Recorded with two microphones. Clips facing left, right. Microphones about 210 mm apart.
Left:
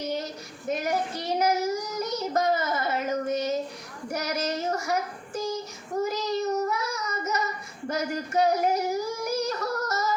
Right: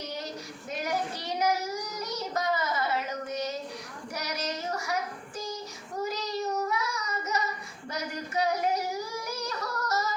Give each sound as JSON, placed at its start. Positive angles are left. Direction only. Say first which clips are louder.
{"t": 0.7, "sound": "child singing", "louder": "left 4 dB", "side_deg": 45}
{"t": 7.9, "sound": "singing", "louder": "left 6 dB", "side_deg": 45}